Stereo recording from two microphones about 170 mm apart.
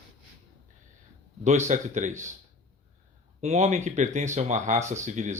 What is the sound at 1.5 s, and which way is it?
Speech, 45° right (ahead or behind).